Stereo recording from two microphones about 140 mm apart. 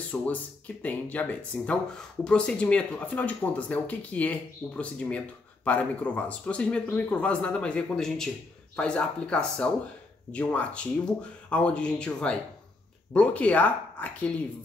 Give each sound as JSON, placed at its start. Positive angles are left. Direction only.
{"t": 0.1, "sound": "speech", "side_deg": 10}